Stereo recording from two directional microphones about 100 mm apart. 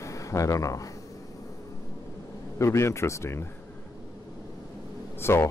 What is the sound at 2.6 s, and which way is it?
Speech, 30° left (ahead or behind).